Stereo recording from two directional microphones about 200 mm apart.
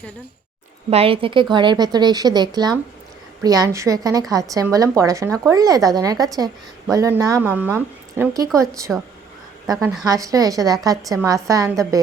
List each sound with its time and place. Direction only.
0.9 s a woman's voice: 30° right (ahead or behind)
10.0 s a woman's voice: 15° right (ahead or behind)